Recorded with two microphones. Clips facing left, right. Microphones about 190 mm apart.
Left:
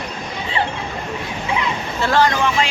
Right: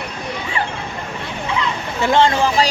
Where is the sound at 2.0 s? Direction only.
25° right (ahead or behind).